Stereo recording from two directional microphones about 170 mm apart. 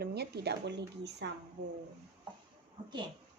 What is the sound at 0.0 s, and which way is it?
Speech, 70° right (ahead or behind).